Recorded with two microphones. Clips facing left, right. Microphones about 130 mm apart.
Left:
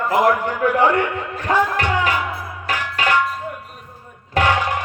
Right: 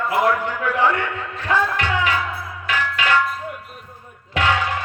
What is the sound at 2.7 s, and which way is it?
Music, 40° left (ahead or behind).